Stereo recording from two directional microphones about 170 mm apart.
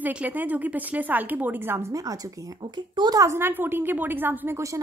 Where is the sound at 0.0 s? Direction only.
10° right (ahead or behind).